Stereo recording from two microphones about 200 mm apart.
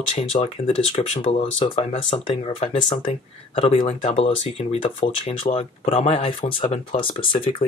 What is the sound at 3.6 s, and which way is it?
Speech, 25° left (ahead or behind).